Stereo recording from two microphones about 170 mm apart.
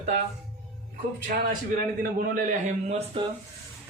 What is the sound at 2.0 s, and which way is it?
Speech, 55° right (ahead or behind).